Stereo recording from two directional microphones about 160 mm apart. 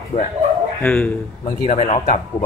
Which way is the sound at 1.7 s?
45° left (ahead or behind).